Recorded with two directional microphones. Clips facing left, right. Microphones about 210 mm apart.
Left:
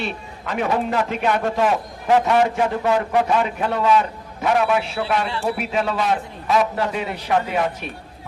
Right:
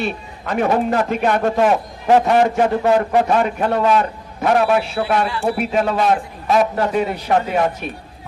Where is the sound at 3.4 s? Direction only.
50° right (ahead or behind).